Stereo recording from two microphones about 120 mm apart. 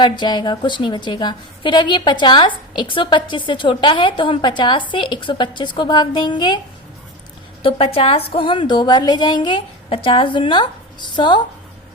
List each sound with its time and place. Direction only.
0.0 s a woman's voice: 40° left (ahead or behind)
7.6 s a woman's voice: 50° left (ahead or behind)